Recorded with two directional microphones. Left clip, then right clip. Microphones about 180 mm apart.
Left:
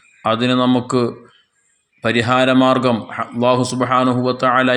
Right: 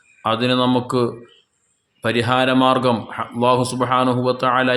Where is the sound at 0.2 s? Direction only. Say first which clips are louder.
Left 2 dB; 15° left (ahead or behind).